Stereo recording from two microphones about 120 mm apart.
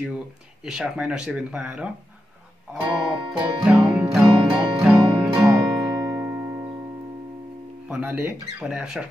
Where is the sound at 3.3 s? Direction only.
10° right (ahead or behind).